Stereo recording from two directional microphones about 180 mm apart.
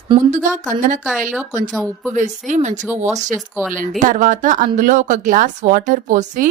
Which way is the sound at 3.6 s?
15° right (ahead or behind).